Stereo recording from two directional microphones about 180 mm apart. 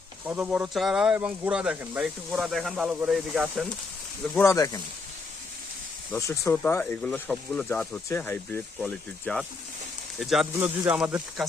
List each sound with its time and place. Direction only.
0.3 s speech: 5° right (ahead or behind)
4.4 s speech: 15° left (ahead or behind)
6.1 s speech: 15° left (ahead or behind); by 11.4 s 5° right (ahead or behind)